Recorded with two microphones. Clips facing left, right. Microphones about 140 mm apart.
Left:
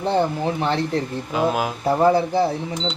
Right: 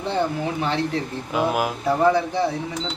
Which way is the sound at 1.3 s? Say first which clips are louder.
Even; 5° right (ahead or behind).